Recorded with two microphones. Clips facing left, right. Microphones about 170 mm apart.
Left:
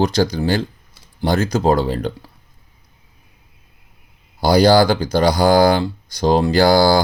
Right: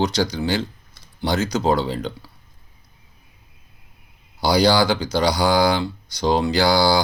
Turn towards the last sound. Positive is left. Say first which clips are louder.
# left 5 dB
turn(degrees=50)  # may be behind; listen again after turning